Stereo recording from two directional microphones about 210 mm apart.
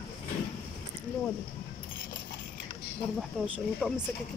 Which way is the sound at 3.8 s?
Centre (ahead or behind).